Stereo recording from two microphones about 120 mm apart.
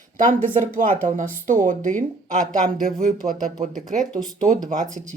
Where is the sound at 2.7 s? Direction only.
Centre (ahead or behind).